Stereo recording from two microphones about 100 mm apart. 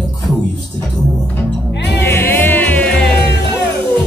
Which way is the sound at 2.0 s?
25° left (ahead or behind).